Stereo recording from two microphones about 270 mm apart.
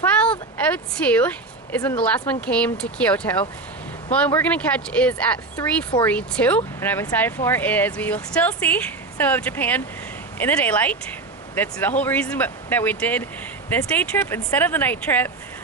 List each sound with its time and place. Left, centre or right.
0.2 s speech: centre
5.5 s speech: centre
6.1 s speech: centre